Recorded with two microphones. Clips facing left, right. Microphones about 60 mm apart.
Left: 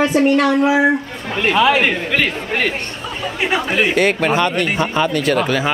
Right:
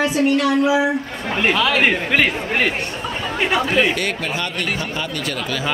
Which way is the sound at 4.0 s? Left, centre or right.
Left.